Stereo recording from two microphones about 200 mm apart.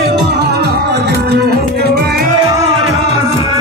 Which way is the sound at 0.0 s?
55° right (ahead or behind).